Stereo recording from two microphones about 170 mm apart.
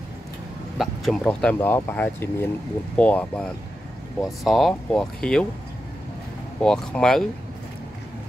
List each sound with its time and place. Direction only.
0.7 s speech: 5° left (ahead or behind)
6.6 s speech: 5° left (ahead or behind)